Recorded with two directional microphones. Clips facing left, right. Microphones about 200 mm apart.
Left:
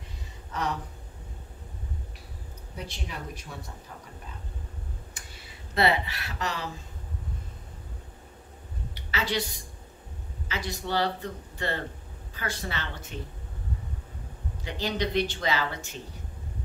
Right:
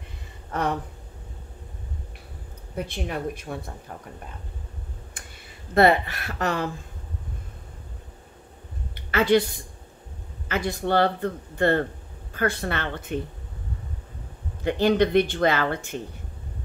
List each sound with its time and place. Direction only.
0.5 s a sound: 55° right (ahead or behind)
2.7 s speech: 55° right (ahead or behind)
5.2 s a sound: 55° right (ahead or behind)
5.8 s speech: 50° right (ahead or behind)
8.9 s a woman's voice: 55° right (ahead or behind)
14.6 s speech: 55° right (ahead or behind)